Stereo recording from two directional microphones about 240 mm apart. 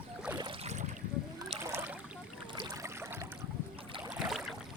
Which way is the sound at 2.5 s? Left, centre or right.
Centre.